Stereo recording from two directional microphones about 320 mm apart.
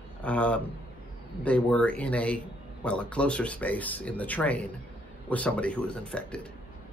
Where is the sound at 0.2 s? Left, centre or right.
Centre.